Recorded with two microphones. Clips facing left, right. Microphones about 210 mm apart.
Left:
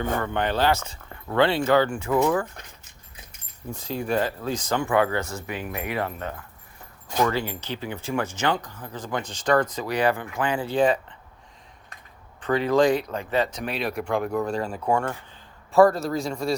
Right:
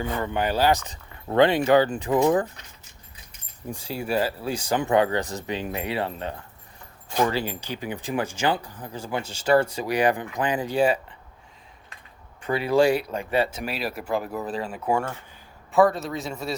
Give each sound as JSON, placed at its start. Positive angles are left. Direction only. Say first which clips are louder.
{"t": 0.2, "sound": "speech", "louder": "right 4 dB", "side_deg": -15}
{"t": 3.7, "sound": "speech", "louder": "left 1 dB", "side_deg": -10}
{"t": 12.4, "sound": "speech", "louder": "even", "side_deg": -10}